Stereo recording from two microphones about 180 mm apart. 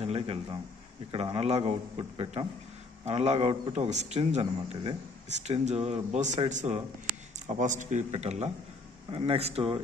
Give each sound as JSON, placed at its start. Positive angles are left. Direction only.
{"t": 0.0, "sound": "a man's voice", "side_deg": -30}